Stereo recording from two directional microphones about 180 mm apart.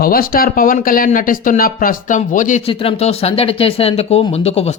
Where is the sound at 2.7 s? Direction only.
30° left (ahead or behind).